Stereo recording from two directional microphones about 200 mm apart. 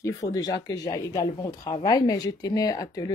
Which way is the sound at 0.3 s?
20° left (ahead or behind).